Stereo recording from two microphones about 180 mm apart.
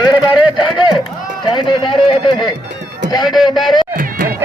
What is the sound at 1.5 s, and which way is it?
Speech, 25° left (ahead or behind).